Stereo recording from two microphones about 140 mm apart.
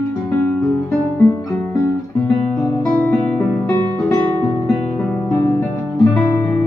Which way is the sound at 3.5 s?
20° left (ahead or behind).